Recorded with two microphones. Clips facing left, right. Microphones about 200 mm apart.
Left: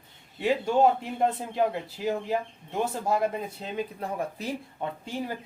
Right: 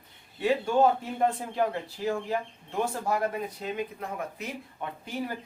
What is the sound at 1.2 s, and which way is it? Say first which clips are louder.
Speech: left 1 dB; 20° left (ahead or behind).